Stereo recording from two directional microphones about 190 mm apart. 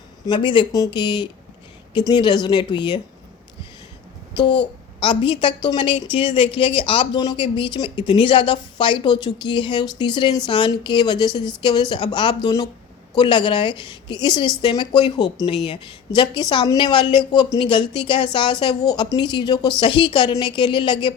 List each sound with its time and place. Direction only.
0.3 s a woman's voice: 25° left (ahead or behind)
4.9 s a woman's voice: 25° left (ahead or behind)